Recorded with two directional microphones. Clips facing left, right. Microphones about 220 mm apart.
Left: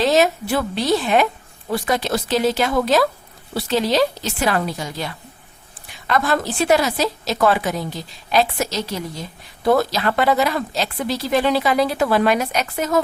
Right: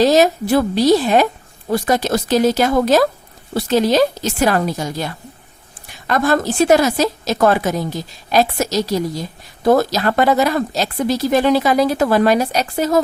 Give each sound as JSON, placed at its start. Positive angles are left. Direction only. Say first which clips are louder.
{"t": 0.0, "sound": "a woman's voice", "louder": "right 4 dB", "side_deg": -40}